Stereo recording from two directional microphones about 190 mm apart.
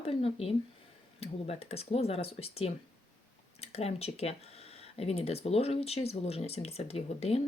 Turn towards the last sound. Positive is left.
turn(degrees=35)  # may be behind; listen again after turning